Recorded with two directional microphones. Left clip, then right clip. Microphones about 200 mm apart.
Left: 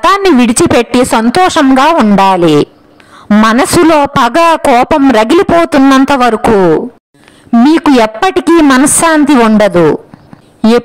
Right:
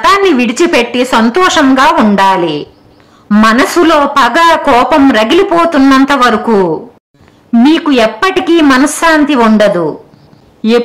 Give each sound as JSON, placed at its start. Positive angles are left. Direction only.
{"t": 0.0, "sound": "a woman's voice", "side_deg": 45}